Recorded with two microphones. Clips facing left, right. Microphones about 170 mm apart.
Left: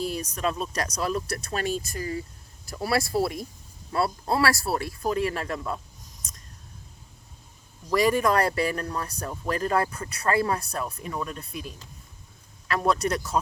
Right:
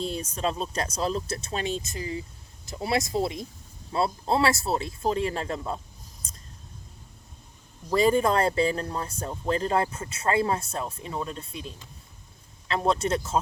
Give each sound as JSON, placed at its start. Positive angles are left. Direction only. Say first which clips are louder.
{"t": 0.0, "sound": "speech", "louder": "left 1 dB", "side_deg": -25}
{"t": 6.2, "sound": "a sound", "louder": "even", "side_deg": -30}
{"t": 7.9, "sound": "speech", "louder": "even", "side_deg": -25}